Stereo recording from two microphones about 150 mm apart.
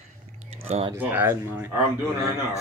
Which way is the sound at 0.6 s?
40° right (ahead or behind).